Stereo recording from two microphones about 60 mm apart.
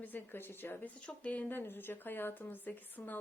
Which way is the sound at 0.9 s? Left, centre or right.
Centre.